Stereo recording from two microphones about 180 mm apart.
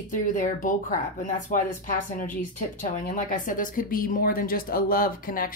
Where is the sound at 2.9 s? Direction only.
45° left (ahead or behind).